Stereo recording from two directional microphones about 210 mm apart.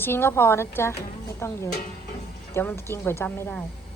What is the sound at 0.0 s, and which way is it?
Speech, 10° left (ahead or behind).